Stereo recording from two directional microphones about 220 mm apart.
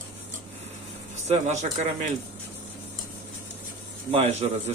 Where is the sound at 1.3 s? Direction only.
30° right (ahead or behind).